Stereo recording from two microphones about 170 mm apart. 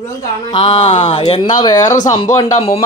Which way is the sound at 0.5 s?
30° left (ahead or behind).